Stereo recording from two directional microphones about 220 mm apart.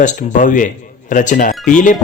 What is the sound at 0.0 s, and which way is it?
A man's voice, 35° left (ahead or behind).